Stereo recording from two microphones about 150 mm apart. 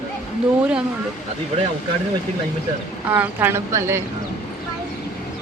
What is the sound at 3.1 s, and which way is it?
Speech, 15° right (ahead or behind).